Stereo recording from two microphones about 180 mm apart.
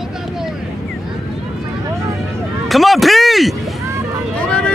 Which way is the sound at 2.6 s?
Centre (ahead or behind).